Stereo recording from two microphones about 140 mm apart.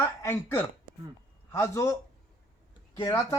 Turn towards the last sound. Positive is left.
turn(degrees=20)  # may be behind; listen again after turning